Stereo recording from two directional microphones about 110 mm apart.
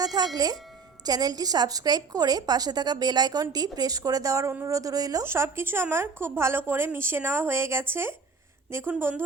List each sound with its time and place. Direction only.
0.0 s music: 35° right (ahead or behind)
1.0 s a woman's voice: 35° right (ahead or behind)
5.2 s speech: 25° right (ahead or behind)